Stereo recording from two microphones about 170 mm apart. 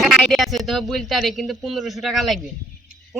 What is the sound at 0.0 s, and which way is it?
Speech, centre (ahead or behind).